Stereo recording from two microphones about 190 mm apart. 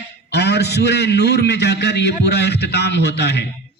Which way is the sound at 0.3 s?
60° left (ahead or behind).